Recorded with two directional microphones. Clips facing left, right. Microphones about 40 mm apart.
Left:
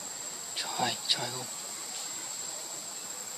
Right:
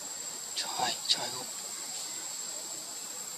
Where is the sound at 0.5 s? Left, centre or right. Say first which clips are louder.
Left 1 dB; centre.